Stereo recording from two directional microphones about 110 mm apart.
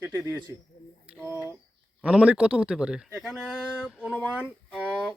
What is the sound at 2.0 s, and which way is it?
Speech, 10° right (ahead or behind).